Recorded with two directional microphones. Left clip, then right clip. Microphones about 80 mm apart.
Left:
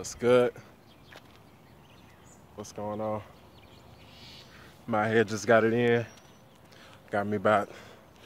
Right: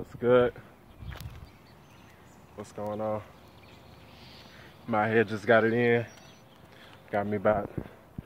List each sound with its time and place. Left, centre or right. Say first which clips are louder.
0.2 s speech: even; left
2.5 s speech: even; centre
4.8 s speech: even; centre
5.3 s speech: even; left